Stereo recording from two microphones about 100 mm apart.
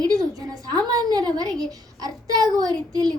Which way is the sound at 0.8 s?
40° right (ahead or behind).